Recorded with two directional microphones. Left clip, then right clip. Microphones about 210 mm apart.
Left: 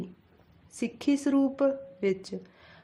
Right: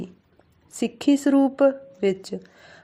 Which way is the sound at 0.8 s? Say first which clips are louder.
Right 7 dB; 20° right (ahead or behind).